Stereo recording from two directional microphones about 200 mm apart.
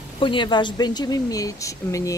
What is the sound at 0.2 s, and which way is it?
Speech, 25° left (ahead or behind).